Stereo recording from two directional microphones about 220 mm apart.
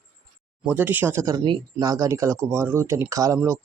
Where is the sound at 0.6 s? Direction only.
10° right (ahead or behind).